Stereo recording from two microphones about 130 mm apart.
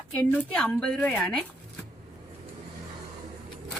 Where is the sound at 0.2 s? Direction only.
10° left (ahead or behind).